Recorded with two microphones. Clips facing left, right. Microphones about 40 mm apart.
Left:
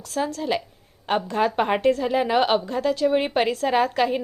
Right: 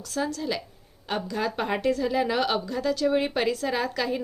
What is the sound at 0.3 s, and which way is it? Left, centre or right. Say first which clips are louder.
A woman's voice: left 4 dB; left.